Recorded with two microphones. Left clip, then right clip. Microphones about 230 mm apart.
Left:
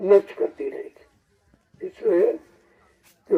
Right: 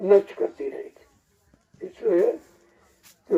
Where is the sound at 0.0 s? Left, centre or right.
Left.